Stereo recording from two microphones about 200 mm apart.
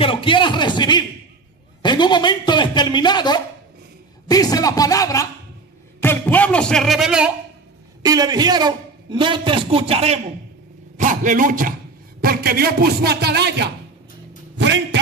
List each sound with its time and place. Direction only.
0.0 s a sound: 25° left (ahead or behind)
4.3 s a man's voice: 20° left (ahead or behind); by 7.3 s 5° right (ahead or behind)
8.0 s a man's voice: 20° right (ahead or behind); by 15.0 s 60° right (ahead or behind)